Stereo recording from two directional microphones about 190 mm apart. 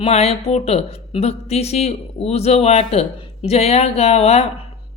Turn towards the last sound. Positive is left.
turn(degrees=35)  # may be behind; listen again after turning